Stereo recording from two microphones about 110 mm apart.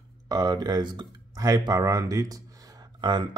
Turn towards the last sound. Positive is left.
turn(degrees=-40)  # may be behind; listen again after turning